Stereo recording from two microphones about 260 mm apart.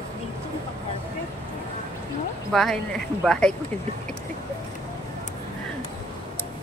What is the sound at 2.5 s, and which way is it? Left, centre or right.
Speech, centre.